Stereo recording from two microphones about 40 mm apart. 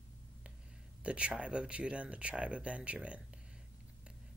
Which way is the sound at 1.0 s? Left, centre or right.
Right.